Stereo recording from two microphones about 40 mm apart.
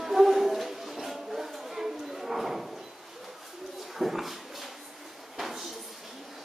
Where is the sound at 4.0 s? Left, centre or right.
Centre.